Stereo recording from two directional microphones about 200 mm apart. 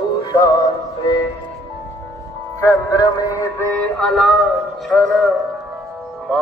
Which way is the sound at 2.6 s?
15° left (ahead or behind).